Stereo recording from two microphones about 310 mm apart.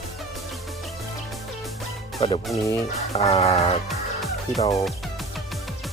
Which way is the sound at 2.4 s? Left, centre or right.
Centre.